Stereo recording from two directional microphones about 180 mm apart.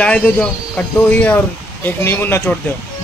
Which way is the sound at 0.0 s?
5° left (ahead or behind).